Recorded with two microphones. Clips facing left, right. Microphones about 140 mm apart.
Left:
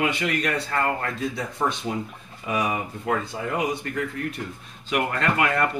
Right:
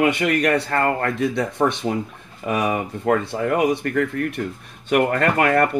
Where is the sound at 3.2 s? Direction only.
65° right (ahead or behind).